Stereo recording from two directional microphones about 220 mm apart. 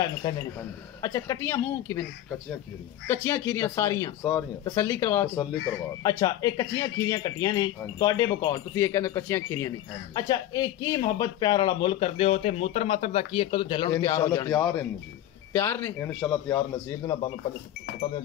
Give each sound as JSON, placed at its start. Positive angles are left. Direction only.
{"t": 0.2, "sound": "speech", "side_deg": 15}
{"t": 3.1, "sound": "speech", "side_deg": 10}